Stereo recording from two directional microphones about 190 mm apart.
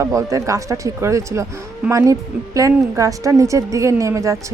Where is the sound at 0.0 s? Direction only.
15° right (ahead or behind).